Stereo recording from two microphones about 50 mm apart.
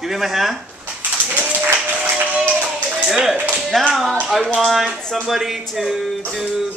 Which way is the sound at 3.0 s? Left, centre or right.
Centre.